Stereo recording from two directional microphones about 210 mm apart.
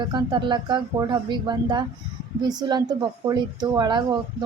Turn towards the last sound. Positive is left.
turn(degrees=-20)  # may be behind; listen again after turning